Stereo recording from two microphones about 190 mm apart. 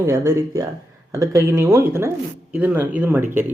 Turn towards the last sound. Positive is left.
turn(degrees=-10)  # may be behind; listen again after turning